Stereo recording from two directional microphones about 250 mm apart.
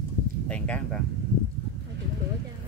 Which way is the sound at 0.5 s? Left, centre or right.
Centre.